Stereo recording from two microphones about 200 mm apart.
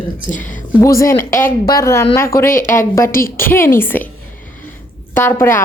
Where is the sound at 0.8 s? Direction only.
15° left (ahead or behind).